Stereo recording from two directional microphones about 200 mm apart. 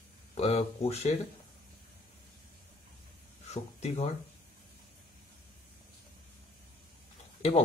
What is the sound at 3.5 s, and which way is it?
Speech, 30° left (ahead or behind).